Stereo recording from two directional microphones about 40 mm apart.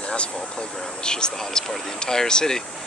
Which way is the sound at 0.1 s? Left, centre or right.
Left.